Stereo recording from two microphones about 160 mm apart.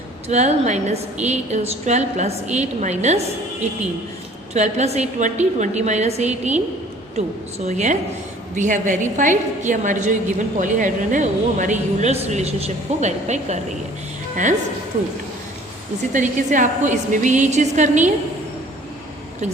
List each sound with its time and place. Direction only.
0.3 s a woman's voice: 45° right (ahead or behind)
4.5 s a woman's voice: 45° right (ahead or behind)
16.1 s a woman's voice: 50° right (ahead or behind)